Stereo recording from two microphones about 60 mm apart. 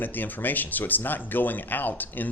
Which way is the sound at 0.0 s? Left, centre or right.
Left.